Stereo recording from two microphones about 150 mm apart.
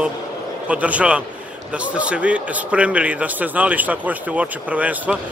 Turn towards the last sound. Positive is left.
turn(degrees=-10)  # may be behind; listen again after turning